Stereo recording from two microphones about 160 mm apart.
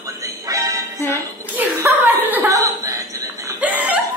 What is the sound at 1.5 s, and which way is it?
Chuckle, 15° right (ahead or behind).